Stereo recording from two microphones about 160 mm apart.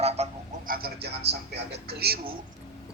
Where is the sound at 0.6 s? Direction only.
70° right (ahead or behind).